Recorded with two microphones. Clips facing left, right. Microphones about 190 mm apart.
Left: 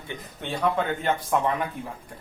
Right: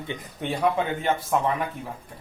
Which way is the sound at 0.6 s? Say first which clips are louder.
Even; 10° right (ahead or behind).